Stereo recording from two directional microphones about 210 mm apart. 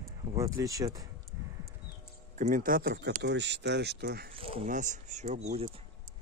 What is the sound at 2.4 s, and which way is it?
Speech, 40° right (ahead or behind).